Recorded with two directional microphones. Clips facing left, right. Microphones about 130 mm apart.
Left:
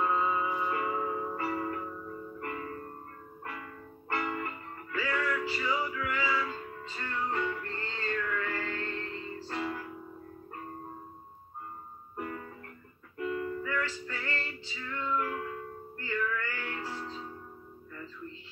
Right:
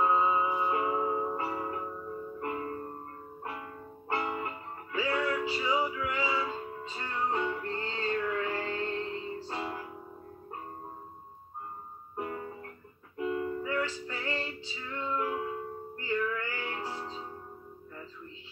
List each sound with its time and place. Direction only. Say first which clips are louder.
0.0 s music: right 3 dB; 25° right (ahead or behind)
4.1 s music: right 1 dB; 25° right (ahead or behind)
12.2 s music: right 2 dB; 25° right (ahead or behind)